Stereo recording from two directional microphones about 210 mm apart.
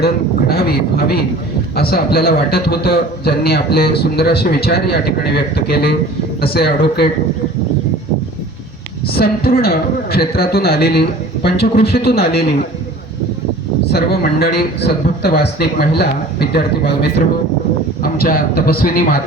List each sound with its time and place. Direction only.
0.0 s a man's voice: 45° left (ahead or behind)
9.1 s a man's voice: 45° left (ahead or behind)
13.9 s a man's voice: 50° left (ahead or behind)